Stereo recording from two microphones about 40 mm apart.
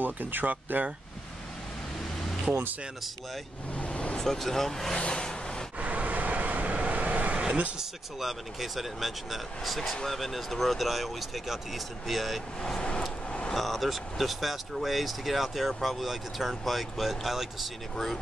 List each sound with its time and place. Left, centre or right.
0.0 s speech: right
3.7 s a sound: left
4.2 s speech: centre
5.0 s a sound: left
5.8 s vehicle: right
7.3 s a sound: right
8.2 s speech: centre
12.6 s vehicle: centre
13.5 s speech: centre
17.9 s speech: centre